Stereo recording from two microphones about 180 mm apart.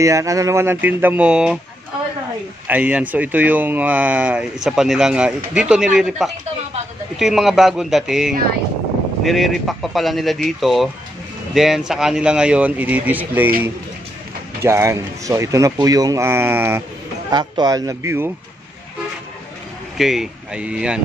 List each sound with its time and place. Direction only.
0.0 s speech: 15° right (ahead or behind)
2.7 s speech: 10° right (ahead or behind)
14.6 s speech: 15° right (ahead or behind)
20.0 s speech: centre (ahead or behind)